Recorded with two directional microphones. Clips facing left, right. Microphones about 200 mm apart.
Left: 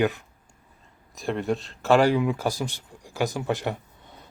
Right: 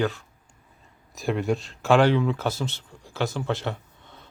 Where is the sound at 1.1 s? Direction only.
Centre (ahead or behind); by 4.3 s 15° left (ahead or behind).